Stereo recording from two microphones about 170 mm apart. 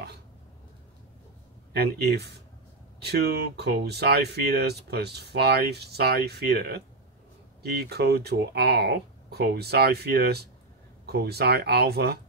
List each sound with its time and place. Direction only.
1.7 s speech: 75° right (ahead or behind)